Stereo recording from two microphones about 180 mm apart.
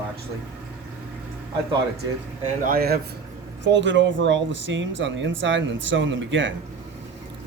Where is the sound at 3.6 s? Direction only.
85° right.